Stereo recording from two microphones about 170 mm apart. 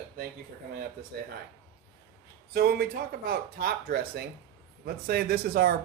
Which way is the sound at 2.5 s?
65° right (ahead or behind).